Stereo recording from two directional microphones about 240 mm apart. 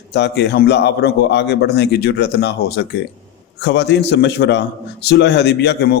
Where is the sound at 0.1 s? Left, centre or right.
Left.